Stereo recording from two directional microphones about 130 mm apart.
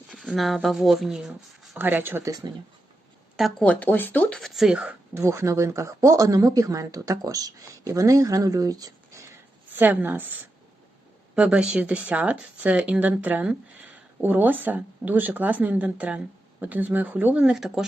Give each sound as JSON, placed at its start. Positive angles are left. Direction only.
{"t": 0.1, "sound": "speech", "side_deg": 0}
{"t": 1.7, "sound": "speech", "side_deg": -15}
{"t": 3.6, "sound": "speech", "side_deg": 10}
{"t": 5.2, "sound": "speech", "side_deg": -20}
{"t": 9.7, "sound": "speech", "side_deg": -15}
{"t": 11.3, "sound": "speech", "side_deg": -10}